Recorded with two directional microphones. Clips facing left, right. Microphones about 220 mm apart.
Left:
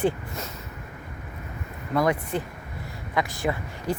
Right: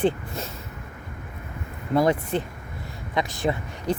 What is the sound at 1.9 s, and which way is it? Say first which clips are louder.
Speech: right 3 dB; 25° right (ahead or behind).